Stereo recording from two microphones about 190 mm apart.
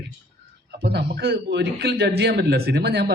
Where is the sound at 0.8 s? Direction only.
60° right (ahead or behind).